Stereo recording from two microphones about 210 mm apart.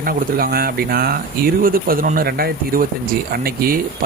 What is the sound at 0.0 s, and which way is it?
Speech, 45° right (ahead or behind).